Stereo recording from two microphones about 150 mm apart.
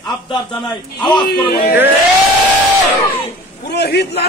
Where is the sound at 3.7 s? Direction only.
90° left.